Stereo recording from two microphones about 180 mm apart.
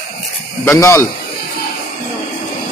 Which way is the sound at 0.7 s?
15° left (ahead or behind).